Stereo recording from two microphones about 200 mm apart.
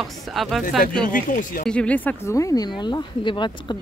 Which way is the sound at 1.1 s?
40° left (ahead or behind).